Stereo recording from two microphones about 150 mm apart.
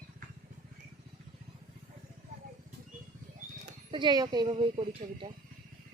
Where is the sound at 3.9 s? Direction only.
30° right (ahead or behind).